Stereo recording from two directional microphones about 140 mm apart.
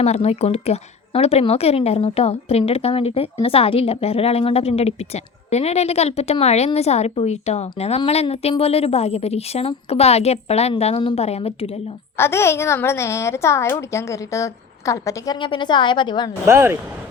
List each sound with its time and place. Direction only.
0.0 s a woman's voice: 50° left (ahead or behind)
12.1 s a woman's voice: 20° left (ahead or behind)
15.4 s a woman's voice: 35° left (ahead or behind)
16.5 s speech: 15° right (ahead or behind)